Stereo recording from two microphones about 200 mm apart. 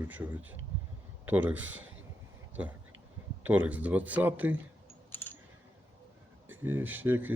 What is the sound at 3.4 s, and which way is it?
Speech, 10° right (ahead or behind).